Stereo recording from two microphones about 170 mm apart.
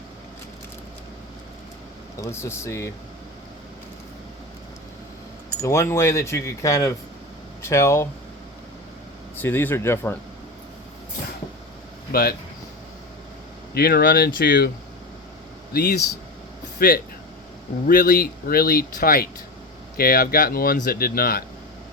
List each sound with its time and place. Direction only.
2.2 s speech: 15° left (ahead or behind)
5.6 s speech: 15° left (ahead or behind)
9.4 s speech: 10° left (ahead or behind)
12.1 s speech: 65° left (ahead or behind)
13.7 s speech: 65° left (ahead or behind)
15.7 s speech: 70° left (ahead or behind)
17.8 s speech: 55° left (ahead or behind)